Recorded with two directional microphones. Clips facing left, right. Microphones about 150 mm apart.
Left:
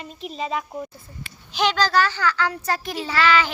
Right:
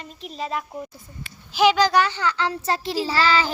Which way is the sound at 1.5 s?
5° right (ahead or behind).